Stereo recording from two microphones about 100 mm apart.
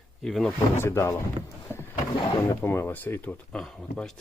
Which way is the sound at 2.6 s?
25° left (ahead or behind).